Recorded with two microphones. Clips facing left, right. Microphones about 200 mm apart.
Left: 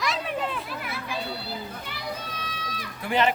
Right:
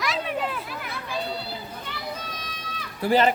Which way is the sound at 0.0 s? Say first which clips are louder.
Right 1 dB; centre (ahead or behind).